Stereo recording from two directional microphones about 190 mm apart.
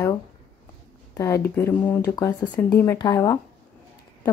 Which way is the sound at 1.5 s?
10° left (ahead or behind).